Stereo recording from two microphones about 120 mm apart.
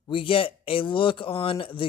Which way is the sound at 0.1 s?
45° left (ahead or behind).